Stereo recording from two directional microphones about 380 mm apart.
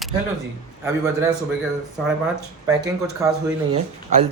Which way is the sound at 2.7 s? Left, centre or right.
Centre.